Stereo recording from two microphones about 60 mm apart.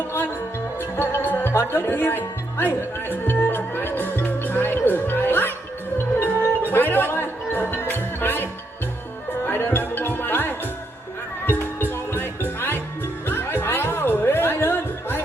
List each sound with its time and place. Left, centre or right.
0.9 s speech: left
3.2 s music: left
9.5 s music: left